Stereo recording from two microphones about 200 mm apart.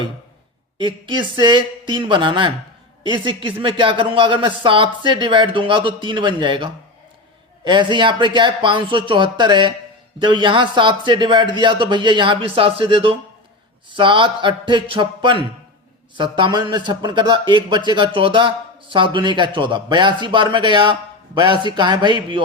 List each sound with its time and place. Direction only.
0.8 s a man's voice: 25° right (ahead or behind)